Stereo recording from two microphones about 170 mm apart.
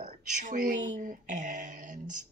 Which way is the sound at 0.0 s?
45° right (ahead or behind).